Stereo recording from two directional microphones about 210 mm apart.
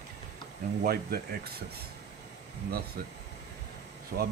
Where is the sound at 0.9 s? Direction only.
45° right (ahead or behind).